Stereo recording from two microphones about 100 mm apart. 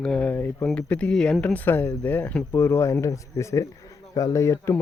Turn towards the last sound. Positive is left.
turn(degrees=30)  # may be behind; listen again after turning